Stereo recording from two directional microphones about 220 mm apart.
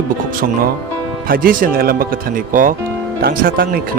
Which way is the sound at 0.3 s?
40° right (ahead or behind).